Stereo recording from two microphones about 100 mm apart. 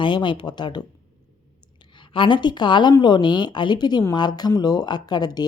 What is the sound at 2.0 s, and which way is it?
A woman's voice, 55° left (ahead or behind).